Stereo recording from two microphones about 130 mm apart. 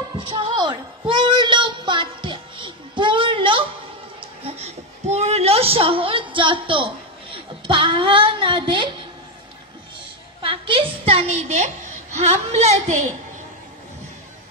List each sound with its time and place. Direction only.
0.2 s child singing: 40° right (ahead or behind)
4.2 s a sound: 50° right (ahead or behind)
7.6 s speech: 40° right (ahead or behind)
10.4 s a woman's voice: 40° right (ahead or behind); by 13.1 s 60° right (ahead or behind)